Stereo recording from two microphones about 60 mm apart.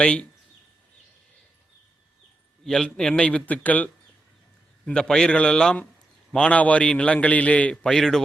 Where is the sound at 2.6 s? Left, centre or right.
Centre; by 3.9 s left.